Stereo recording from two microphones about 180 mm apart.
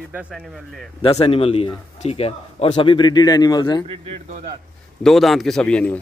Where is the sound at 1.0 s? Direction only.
30° left (ahead or behind).